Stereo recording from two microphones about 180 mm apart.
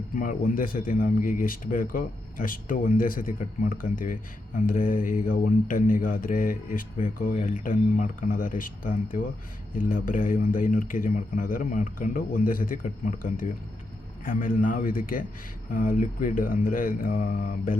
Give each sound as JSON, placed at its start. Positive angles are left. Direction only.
{"t": 0.2, "sound": "speech", "side_deg": 50}